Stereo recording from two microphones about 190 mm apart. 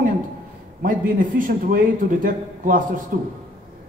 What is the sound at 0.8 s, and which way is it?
Speech, 45° right (ahead or behind).